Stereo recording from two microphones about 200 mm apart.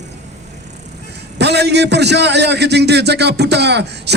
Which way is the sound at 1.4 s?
55° right (ahead or behind).